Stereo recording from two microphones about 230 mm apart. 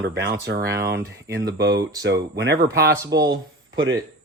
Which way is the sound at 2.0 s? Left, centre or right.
Right.